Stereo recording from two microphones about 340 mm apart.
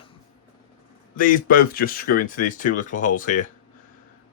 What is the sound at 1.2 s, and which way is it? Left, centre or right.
Speech, left.